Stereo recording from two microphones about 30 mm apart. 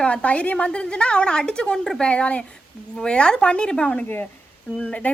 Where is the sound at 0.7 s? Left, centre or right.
Left.